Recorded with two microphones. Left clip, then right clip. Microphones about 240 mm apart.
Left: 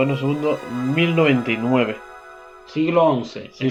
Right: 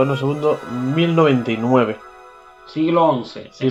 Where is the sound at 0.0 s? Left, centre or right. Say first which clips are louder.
Right 3 dB; right.